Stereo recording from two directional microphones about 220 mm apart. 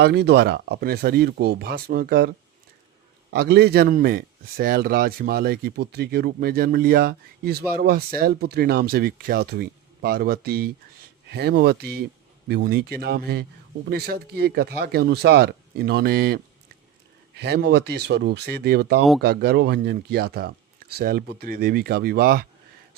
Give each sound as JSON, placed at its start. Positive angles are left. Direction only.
{"t": 0.0, "sound": "a man's voice", "side_deg": -50}
{"t": 3.3, "sound": "a man's voice", "side_deg": -45}